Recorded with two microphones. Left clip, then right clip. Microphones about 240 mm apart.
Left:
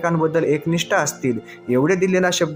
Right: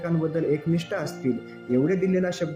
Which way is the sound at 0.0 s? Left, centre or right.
Centre.